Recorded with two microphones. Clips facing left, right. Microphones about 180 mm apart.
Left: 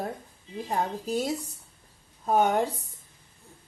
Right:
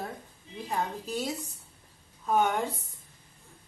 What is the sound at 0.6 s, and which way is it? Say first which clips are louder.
A woman's voice: left 3 dB; 40° left (ahead or behind).